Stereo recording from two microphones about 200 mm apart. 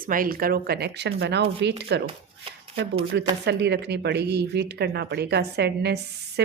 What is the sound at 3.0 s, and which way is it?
Speech, 30° right (ahead or behind).